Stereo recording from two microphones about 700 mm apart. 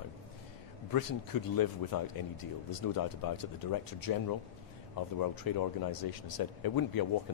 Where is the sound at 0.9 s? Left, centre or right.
Left.